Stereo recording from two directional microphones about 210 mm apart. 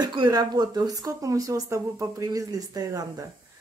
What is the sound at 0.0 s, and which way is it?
Speech, 20° right (ahead or behind).